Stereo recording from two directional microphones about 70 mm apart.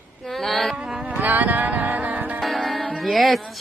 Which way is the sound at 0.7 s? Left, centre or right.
Centre.